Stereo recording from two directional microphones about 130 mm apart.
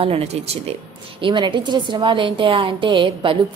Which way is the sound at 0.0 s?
50° right (ahead or behind).